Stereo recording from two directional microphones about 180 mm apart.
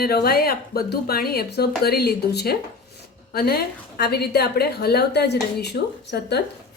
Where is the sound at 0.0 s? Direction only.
60° left (ahead or behind).